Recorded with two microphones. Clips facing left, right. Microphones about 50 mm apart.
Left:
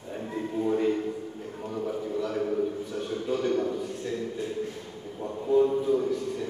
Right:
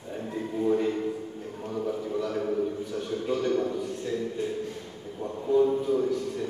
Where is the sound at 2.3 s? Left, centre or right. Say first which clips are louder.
Left 1 dB; centre.